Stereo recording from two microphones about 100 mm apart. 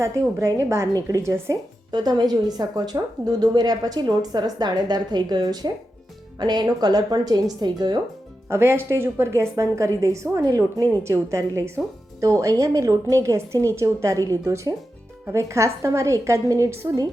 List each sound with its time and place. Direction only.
0.0 s a woman's voice: 30° right (ahead or behind)
1.9 s a woman's voice: 45° right (ahead or behind)
8.4 s a woman's voice: 25° right (ahead or behind)